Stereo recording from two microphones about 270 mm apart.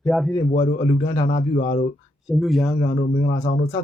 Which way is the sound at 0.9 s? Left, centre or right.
Centre.